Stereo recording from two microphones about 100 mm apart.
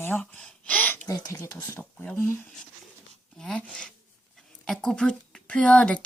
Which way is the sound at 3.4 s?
5° left (ahead or behind).